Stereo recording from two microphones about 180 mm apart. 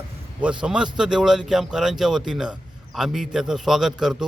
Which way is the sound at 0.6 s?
5° right (ahead or behind).